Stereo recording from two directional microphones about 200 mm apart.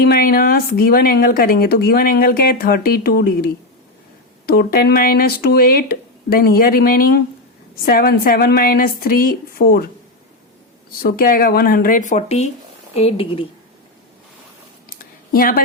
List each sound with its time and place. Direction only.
0.0 s speech: 50° left (ahead or behind)
11.0 s a woman's voice: 45° left (ahead or behind); by 13.5 s 25° left (ahead or behind)
15.3 s speech: 45° left (ahead or behind)